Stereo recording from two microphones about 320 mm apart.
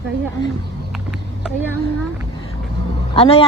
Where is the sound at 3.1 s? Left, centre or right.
Centre.